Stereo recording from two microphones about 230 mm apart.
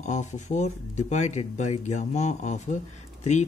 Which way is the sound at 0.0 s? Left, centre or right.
Left.